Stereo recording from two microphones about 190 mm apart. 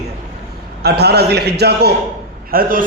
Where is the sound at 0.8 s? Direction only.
60° right (ahead or behind).